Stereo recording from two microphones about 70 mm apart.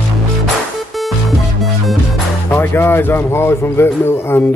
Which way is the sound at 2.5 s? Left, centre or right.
Left.